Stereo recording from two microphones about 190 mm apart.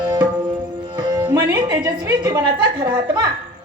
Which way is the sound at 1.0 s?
20° right (ahead or behind).